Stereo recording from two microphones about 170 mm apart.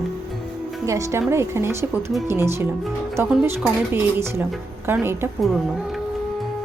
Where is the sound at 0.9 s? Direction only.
20° right (ahead or behind).